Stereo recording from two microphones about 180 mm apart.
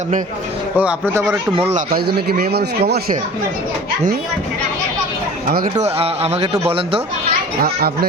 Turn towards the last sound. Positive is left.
turn(degrees=-60)  # may be behind; listen again after turning